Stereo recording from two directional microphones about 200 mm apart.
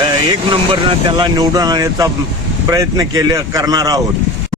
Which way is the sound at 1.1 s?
20° right (ahead or behind).